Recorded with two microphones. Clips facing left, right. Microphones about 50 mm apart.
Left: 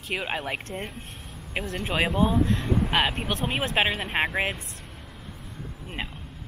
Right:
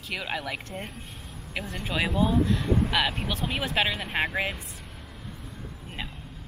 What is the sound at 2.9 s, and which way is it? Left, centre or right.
Speech, left.